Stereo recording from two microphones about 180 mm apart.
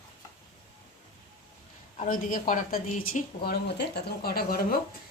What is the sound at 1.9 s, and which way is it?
A woman's voice, 45° left (ahead or behind).